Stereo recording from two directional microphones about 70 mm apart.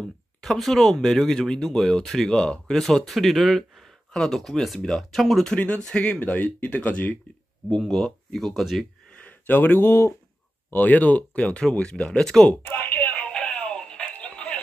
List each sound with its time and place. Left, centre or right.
0.0 s speech: centre
6.1 s speech: left
7.7 s speech: centre
9.1 s speech: left
10.7 s speech: left
12.6 s a sound: left
13.3 s music: centre